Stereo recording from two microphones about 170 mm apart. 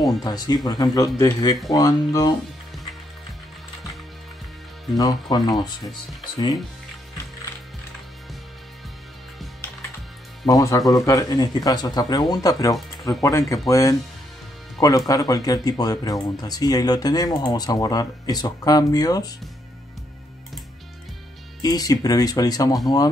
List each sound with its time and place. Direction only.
0.0 s speech: 20° left (ahead or behind)
4.9 s speech: 20° left (ahead or behind)
10.4 s speech: 20° left (ahead or behind)
21.5 s speech: 20° left (ahead or behind)